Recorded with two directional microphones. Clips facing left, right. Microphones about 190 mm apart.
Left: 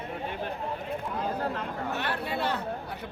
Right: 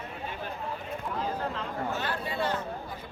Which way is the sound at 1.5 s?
60° left (ahead or behind).